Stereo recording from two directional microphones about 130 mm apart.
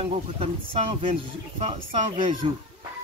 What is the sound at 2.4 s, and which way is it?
Speech, 45° right (ahead or behind).